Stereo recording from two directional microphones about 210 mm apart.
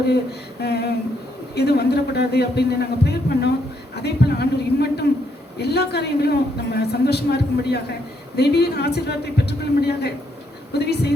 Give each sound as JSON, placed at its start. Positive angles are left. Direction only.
{"t": 0.6, "sound": "a man's voice", "side_deg": 50}
{"t": 3.9, "sound": "a sound", "side_deg": 50}
{"t": 5.5, "sound": "a man's voice", "side_deg": 50}